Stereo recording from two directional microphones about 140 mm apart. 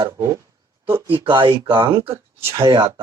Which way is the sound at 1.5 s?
35° right (ahead or behind).